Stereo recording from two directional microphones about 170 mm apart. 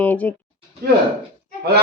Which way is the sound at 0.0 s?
10° left (ahead or behind).